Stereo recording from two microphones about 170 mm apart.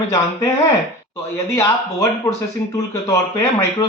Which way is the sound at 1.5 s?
20° left (ahead or behind).